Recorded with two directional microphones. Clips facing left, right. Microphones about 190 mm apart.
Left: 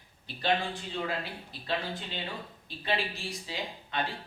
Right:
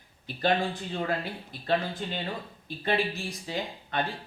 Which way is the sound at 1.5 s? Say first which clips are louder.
Right 6 dB; 50° right (ahead or behind).